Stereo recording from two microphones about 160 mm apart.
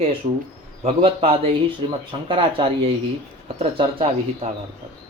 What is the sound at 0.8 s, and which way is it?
Speech, 40° right (ahead or behind).